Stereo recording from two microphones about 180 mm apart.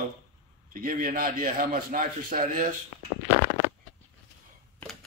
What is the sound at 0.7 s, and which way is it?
A man's voice, 50° right (ahead or behind).